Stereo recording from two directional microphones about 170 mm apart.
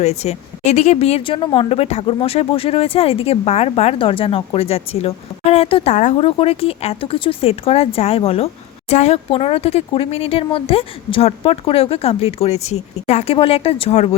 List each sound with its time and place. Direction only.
0.0 s speech: 40° left (ahead or behind)